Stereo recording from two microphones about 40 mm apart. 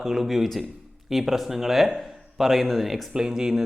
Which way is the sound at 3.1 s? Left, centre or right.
Centre.